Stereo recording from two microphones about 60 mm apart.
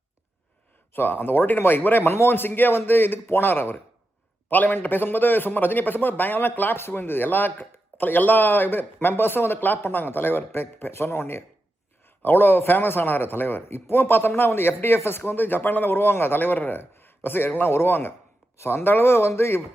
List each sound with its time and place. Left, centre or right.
0.9 s a man's voice: left